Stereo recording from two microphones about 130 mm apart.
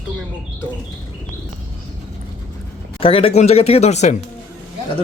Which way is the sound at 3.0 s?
45° left (ahead or behind).